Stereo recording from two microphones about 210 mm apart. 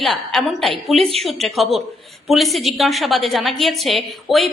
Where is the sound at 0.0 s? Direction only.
Centre (ahead or behind).